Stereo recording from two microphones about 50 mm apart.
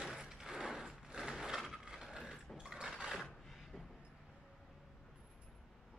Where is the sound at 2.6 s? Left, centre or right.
Centre.